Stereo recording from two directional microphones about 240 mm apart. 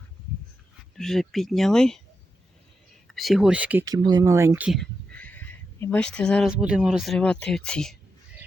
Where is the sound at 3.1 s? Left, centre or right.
Centre.